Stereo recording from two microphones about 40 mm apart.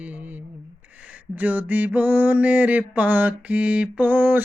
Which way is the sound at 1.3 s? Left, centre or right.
Right.